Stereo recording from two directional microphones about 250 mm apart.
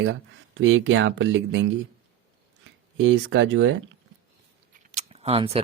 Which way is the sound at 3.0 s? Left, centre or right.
Right.